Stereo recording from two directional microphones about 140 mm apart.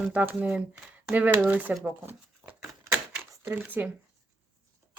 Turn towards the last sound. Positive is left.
turn(degrees=-10)  # may be behind; listen again after turning